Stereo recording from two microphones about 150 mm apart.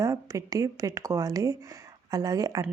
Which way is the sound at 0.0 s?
25° right (ahead or behind).